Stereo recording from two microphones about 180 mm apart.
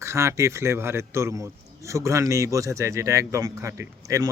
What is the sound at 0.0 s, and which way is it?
Speech, 15° right (ahead or behind).